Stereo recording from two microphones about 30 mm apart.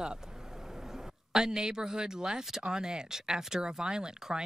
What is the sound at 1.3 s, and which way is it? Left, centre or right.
Speech, right.